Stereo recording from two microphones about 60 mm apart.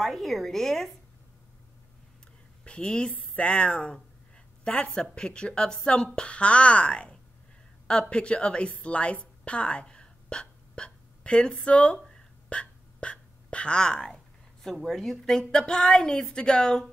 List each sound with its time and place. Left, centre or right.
0.0 s a woman's voice: centre
2.6 s a woman's voice: centre